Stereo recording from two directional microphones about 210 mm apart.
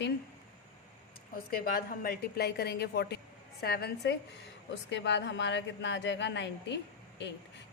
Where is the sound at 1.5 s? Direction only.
45° left (ahead or behind).